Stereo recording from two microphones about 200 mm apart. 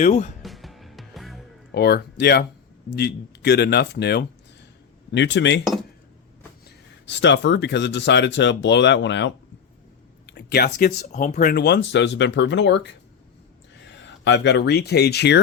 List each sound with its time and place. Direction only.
0.0 s speech: 35° left (ahead or behind)
0.4 s music: centre (ahead or behind)
1.7 s speech: 55° left (ahead or behind)
6.7 s speech: 60° left (ahead or behind)